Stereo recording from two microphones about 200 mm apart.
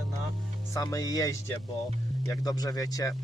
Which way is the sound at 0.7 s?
15° left (ahead or behind).